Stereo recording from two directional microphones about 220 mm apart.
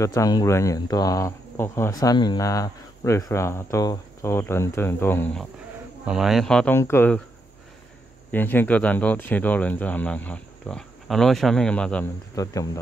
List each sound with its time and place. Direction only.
0.0 s speech: 15° left (ahead or behind)
8.3 s speech: 10° left (ahead or behind)
12.4 s speech: 15° left (ahead or behind)